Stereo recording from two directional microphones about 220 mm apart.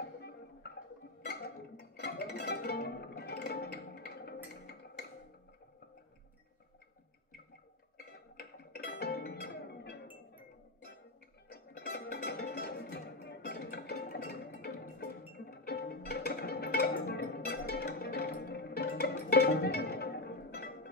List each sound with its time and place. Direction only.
0.7 s music: 50° left (ahead or behind)
8.0 s music: 45° left (ahead or behind)
11.5 s music: 45° left (ahead or behind)